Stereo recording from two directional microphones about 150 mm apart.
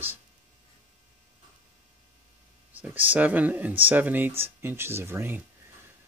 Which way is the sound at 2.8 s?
10° right (ahead or behind).